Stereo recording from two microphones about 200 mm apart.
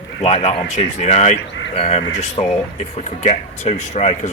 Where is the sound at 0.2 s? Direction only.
30° left (ahead or behind).